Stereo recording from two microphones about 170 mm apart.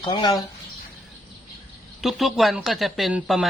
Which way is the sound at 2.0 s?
Centre (ahead or behind).